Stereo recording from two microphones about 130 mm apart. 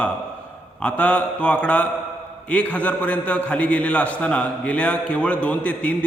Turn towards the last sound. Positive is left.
turn(degrees=10)  # may be behind; listen again after turning